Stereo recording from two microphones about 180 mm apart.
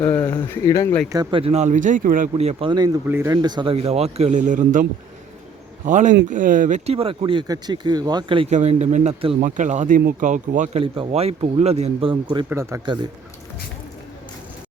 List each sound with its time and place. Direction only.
0.0 s speech: 10° left (ahead or behind)
1.1 s speech: 25° right (ahead or behind)
3.1 s speech: 15° right (ahead or behind)
3.3 s speech: 25° right (ahead or behind)
8.5 s speech: 40° right (ahead or behind)
10.8 s speech: 30° right (ahead or behind)
12.5 s speech: 15° right (ahead or behind)